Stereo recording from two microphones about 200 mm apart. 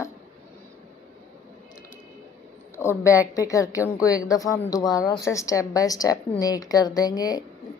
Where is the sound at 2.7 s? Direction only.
15° left (ahead or behind).